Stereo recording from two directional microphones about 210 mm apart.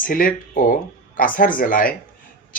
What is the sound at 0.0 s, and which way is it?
Speech, 40° left (ahead or behind).